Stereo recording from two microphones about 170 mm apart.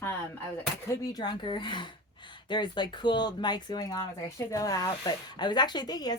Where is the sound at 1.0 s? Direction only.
25° left (ahead or behind).